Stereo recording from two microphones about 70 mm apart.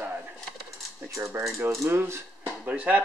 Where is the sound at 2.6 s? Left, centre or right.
Centre.